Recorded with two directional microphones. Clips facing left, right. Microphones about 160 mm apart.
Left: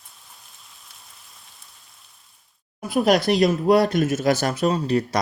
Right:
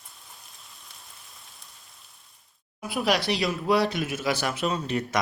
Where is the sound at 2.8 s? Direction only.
45° left (ahead or behind).